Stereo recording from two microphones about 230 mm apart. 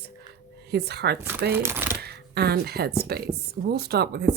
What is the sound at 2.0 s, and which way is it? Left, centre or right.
A woman's voice, right.